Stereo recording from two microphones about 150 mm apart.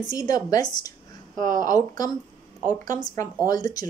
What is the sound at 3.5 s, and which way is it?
Speech, 25° left (ahead or behind).